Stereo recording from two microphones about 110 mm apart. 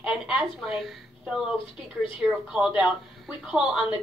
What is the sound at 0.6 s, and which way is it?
A woman's voice, centre (ahead or behind).